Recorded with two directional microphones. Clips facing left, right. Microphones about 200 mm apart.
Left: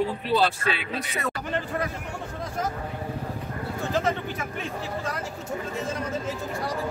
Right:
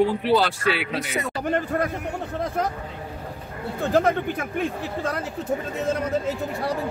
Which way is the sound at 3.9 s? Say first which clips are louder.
Right 7 dB; 55° right (ahead or behind).